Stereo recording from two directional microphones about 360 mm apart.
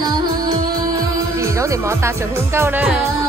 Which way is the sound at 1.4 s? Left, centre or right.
Centre.